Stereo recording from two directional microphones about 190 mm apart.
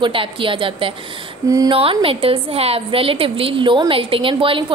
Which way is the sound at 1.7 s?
30° right (ahead or behind).